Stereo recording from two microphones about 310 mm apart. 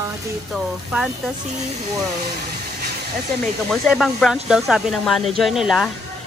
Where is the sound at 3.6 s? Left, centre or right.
Centre.